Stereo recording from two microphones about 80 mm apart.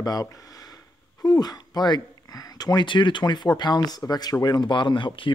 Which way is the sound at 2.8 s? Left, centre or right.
Left.